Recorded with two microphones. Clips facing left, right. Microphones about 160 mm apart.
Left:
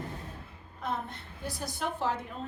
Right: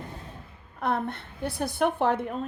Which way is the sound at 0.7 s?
65° right (ahead or behind).